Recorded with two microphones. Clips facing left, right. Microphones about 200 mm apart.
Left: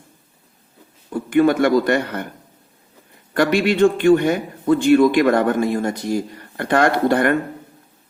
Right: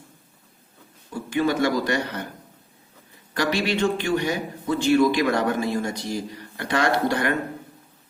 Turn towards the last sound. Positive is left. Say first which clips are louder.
# left 6 dB
turn(degrees=55)  # may be behind; listen again after turning